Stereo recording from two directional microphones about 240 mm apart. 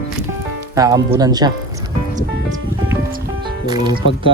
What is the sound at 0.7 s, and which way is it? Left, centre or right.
Speech, centre.